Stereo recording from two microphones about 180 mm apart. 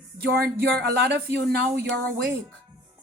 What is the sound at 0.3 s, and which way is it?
A woman's voice, 65° right (ahead or behind).